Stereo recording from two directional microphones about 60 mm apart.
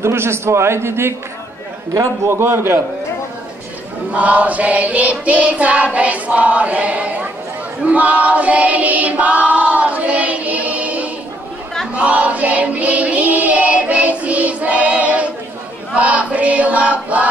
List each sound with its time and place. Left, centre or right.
0.0 s a man's voice: right
2.2 s a man's voice: right
4.1 s choir: right
11.9 s child singing: right
15.9 s choir: right